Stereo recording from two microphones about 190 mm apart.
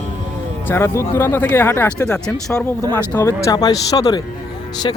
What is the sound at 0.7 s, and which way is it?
Speech, 15° left (ahead or behind).